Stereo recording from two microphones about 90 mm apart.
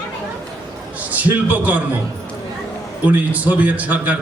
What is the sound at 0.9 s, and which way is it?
Speech, 20° right (ahead or behind).